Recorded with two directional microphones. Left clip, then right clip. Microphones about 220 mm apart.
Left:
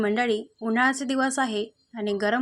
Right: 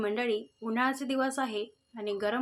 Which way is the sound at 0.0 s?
35° left (ahead or behind).